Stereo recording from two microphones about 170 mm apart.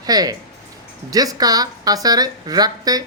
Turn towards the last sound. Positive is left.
turn(degrees=-20)  # may be behind; listen again after turning